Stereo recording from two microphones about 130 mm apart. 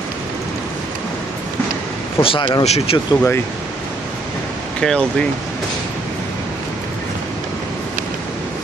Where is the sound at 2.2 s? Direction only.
40° left (ahead or behind).